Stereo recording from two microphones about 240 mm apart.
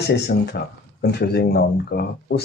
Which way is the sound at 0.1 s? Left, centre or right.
Left.